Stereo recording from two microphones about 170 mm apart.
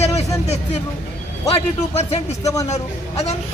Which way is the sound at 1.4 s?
35° left (ahead or behind).